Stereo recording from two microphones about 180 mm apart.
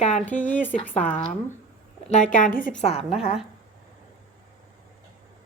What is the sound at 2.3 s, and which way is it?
Speech, 50° left (ahead or behind).